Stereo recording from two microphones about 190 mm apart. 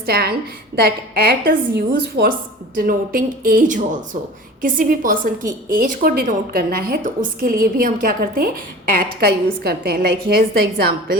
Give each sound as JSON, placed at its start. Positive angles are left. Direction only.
{"t": 0.0, "sound": "a woman's voice", "side_deg": -55}
{"t": 2.7, "sound": "a woman's voice", "side_deg": -45}